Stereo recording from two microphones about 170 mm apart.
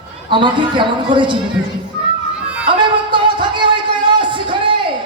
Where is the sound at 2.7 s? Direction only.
30° right (ahead or behind).